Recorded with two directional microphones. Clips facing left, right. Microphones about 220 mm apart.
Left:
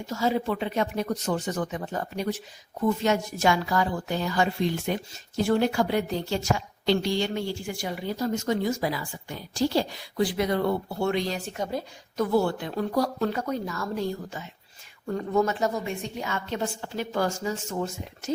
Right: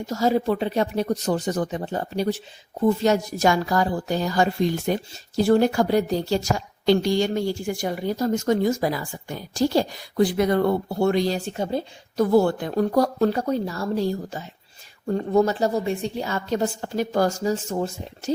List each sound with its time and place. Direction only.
0.1 s a woman's voice: 40° right (ahead or behind)